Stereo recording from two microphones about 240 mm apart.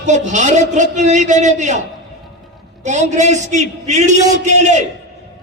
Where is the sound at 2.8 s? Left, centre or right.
Right.